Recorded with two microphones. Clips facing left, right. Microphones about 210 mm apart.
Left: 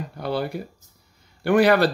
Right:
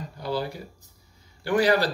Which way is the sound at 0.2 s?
60° left (ahead or behind).